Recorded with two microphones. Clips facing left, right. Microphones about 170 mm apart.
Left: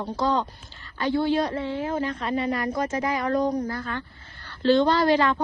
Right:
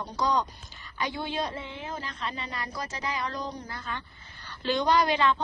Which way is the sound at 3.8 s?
20° right (ahead or behind).